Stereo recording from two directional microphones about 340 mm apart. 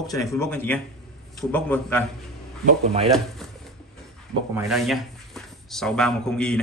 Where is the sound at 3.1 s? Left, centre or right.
Centre.